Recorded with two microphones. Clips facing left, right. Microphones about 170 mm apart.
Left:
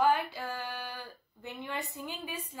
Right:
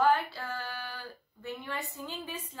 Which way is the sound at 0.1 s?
15° left (ahead or behind).